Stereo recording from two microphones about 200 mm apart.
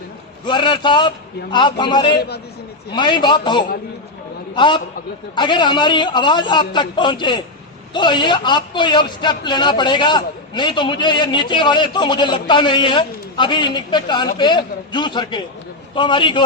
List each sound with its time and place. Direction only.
0.4 s a man's voice: 25° left (ahead or behind)